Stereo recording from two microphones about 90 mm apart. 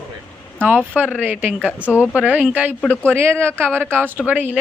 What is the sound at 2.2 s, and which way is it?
Speech, 15° right (ahead or behind).